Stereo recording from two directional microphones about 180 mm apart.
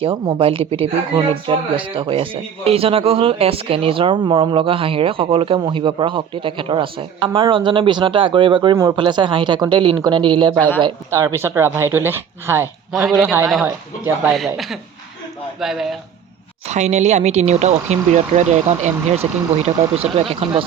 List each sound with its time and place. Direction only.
0.0 s speech: 30° right (ahead or behind)
11.1 s speech: 15° right (ahead or behind)
14.3 s a woman's voice: centre (ahead or behind)
16.6 s speech: 40° right (ahead or behind)